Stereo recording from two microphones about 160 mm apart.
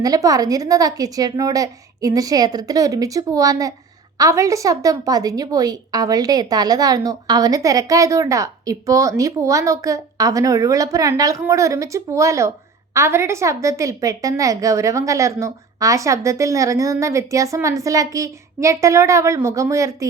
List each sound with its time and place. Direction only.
0.0 s a woman's voice: 20° right (ahead or behind)